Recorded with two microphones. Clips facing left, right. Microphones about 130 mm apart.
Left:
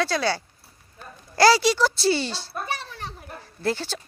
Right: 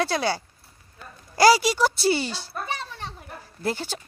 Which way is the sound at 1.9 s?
50° right (ahead or behind).